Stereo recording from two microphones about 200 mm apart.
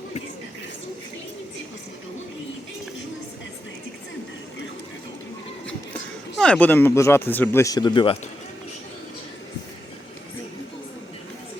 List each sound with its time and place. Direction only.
6.3 s speech: 5° left (ahead or behind); by 8.2 s 25° left (ahead or behind)